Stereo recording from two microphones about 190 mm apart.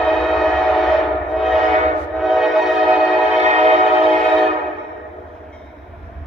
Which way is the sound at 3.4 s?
35° right (ahead or behind).